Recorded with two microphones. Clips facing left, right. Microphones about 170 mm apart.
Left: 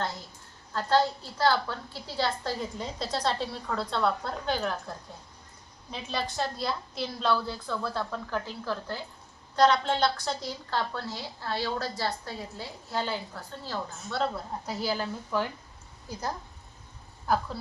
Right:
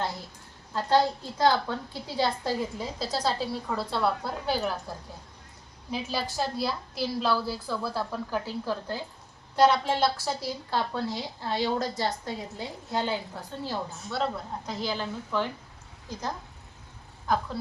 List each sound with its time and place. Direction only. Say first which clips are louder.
0.7 s a woman's voice: right 1 dB; 15° right (ahead or behind)
14.1 s speech: even; centre (ahead or behind)
17.2 s speech: even; 5° left (ahead or behind)